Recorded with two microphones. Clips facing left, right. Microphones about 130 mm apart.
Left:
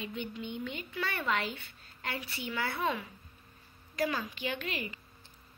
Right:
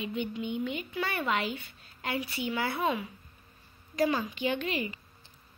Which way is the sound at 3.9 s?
25° right (ahead or behind).